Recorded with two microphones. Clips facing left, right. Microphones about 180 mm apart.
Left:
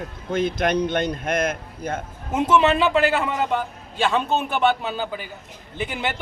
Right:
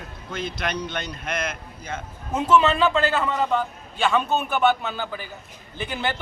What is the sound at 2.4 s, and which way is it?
A man's voice, 20° left (ahead or behind).